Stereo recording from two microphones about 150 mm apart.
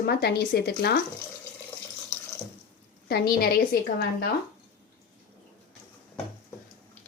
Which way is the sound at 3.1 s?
85° left.